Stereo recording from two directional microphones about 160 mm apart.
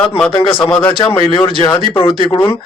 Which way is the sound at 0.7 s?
10° left (ahead or behind).